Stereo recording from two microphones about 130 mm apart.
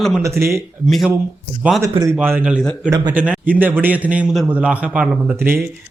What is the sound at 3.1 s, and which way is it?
A man's voice, 10° right (ahead or behind).